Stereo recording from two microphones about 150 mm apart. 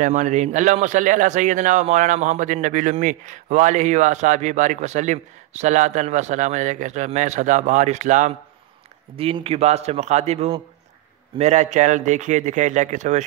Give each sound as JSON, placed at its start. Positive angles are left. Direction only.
{"t": 0.0, "sound": "a man's voice", "side_deg": -55}
{"t": 9.1, "sound": "a man's voice", "side_deg": -40}